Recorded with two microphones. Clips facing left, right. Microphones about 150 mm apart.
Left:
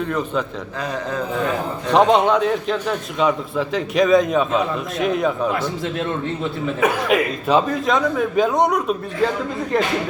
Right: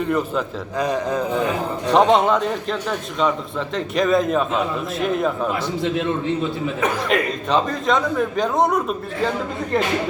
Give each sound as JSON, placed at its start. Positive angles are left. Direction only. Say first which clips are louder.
{"t": 0.1, "sound": "speech", "louder": "right 1 dB", "side_deg": -5}
{"t": 1.9, "sound": "a man's voice", "louder": "left 1 dB", "side_deg": 0}
{"t": 6.7, "sound": "a man's voice", "louder": "left 4 dB", "side_deg": 5}